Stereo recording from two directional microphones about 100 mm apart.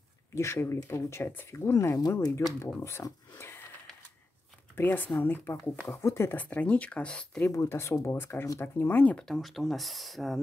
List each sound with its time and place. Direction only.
0.3 s speech: 25° left (ahead or behind)
4.7 s speech: 20° left (ahead or behind)
7.4 s speech: 25° left (ahead or behind)
9.3 s speech: centre (ahead or behind)